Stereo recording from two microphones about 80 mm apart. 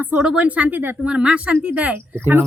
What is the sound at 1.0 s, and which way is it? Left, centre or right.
Speech, centre.